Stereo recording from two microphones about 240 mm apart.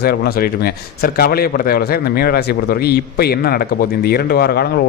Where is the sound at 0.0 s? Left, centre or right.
Left.